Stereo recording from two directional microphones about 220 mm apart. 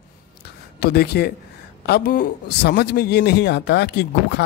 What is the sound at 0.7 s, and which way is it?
A man's voice, 45° left (ahead or behind).